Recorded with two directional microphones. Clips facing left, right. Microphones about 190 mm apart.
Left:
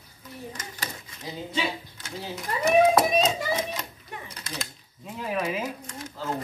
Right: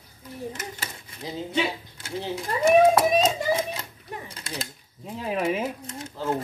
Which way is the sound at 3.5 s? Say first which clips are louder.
Right 1 dB; 30° right (ahead or behind).